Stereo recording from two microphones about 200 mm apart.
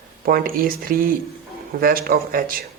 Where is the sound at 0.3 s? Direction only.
45° right (ahead or behind).